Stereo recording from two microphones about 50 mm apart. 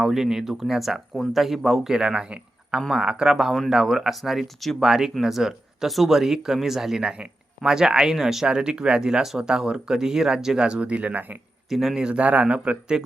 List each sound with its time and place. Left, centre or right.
0.0 s speech: centre
4.9 s speech: centre
7.0 s speech: centre; by 11.3 s right
11.7 s speech: centre
11.9 s speech: centre